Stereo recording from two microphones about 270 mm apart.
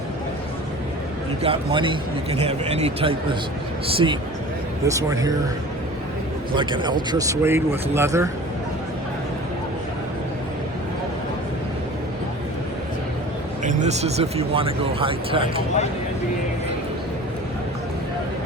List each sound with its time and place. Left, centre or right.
1.4 s speech: centre
6.6 s speech: centre
13.7 s speech: right